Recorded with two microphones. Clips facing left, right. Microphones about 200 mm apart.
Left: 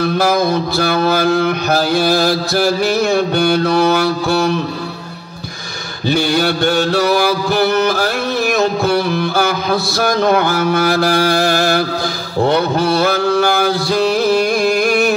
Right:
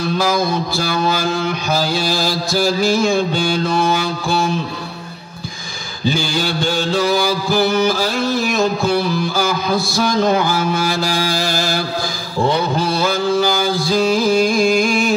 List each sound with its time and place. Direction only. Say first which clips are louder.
0.0 s mantra: left 3 dB; 55° left (ahead or behind)
6.0 s mantra: left 4 dB; 60° left (ahead or behind)